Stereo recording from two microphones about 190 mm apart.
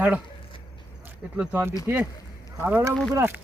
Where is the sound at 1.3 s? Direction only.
10° right (ahead or behind).